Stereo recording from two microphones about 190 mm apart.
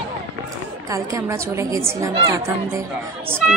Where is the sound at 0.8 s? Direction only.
15° right (ahead or behind).